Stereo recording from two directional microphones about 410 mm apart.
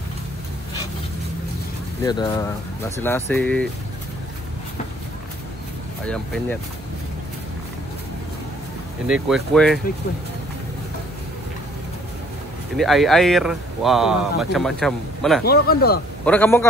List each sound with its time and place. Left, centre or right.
2.0 s speech: centre
6.0 s speech: centre
9.0 s speech: centre
12.7 s speech: centre
15.4 s speech: left
16.3 s speech: centre